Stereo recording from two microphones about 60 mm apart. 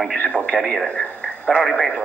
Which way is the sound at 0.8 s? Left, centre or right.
Centre.